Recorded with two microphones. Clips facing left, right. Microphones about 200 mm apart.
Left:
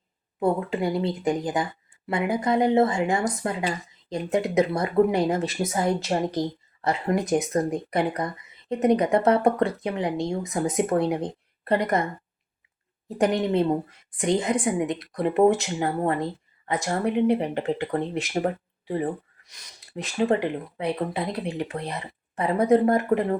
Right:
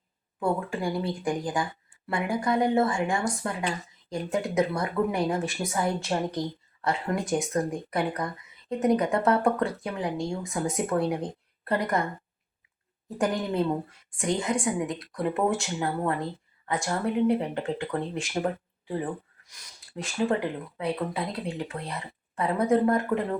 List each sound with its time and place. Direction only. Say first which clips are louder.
0.3 s speech: left 4 dB; 20° left (ahead or behind)
13.1 s speech: left 5 dB; 20° left (ahead or behind)